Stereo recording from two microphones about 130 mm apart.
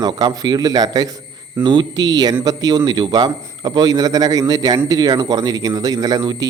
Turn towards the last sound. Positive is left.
turn(degrees=-30)  # may be behind; listen again after turning